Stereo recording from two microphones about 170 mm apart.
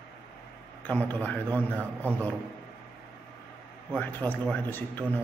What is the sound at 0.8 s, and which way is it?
A man's voice, 10° left (ahead or behind).